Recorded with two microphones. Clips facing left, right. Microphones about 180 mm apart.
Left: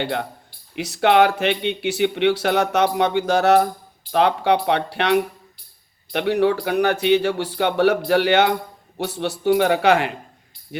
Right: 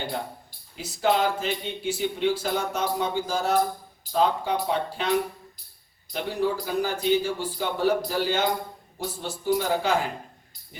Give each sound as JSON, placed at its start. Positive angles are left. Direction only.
{"t": 0.0, "sound": "speech", "side_deg": 75}